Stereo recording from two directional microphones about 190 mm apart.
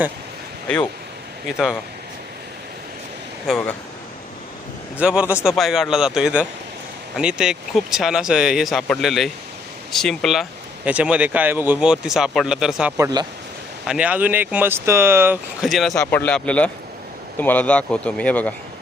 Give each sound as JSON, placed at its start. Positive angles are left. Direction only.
{"t": 1.5, "sound": "speech", "side_deg": 0}
{"t": 4.9, "sound": "speech", "side_deg": -5}
{"t": 13.0, "sound": "speech", "side_deg": -20}
{"t": 13.8, "sound": "speech", "side_deg": -5}
{"t": 15.6, "sound": "speech", "side_deg": 0}
{"t": 16.0, "sound": "speech", "side_deg": 10}